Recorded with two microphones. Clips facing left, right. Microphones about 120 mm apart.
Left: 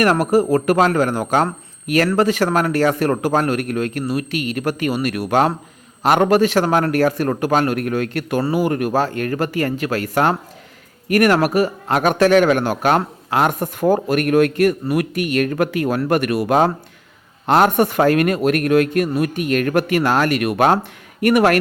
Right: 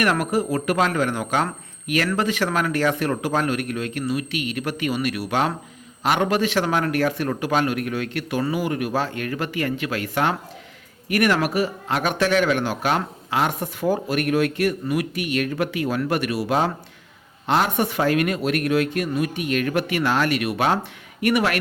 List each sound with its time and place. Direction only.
0.0 s speech: 40° left (ahead or behind)